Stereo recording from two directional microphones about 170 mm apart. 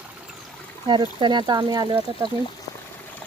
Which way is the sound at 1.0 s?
25° right (ahead or behind).